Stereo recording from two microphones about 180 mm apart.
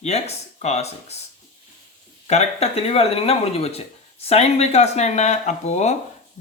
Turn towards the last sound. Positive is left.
turn(degrees=40)  # may be behind; listen again after turning